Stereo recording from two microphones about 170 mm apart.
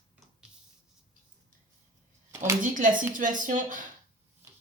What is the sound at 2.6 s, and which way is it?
Speech, 50° right (ahead or behind).